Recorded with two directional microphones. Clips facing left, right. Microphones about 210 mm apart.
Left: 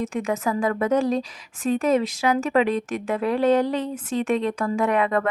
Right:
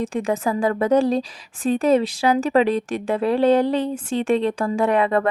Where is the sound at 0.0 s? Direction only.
30° right (ahead or behind).